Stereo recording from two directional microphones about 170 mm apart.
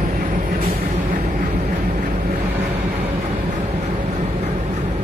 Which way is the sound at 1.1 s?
55° right (ahead or behind).